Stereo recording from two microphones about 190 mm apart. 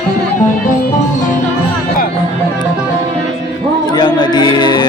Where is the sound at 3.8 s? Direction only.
20° left (ahead or behind).